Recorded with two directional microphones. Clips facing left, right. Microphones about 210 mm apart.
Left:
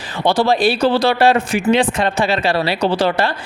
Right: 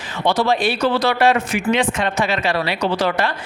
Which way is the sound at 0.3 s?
35° left (ahead or behind).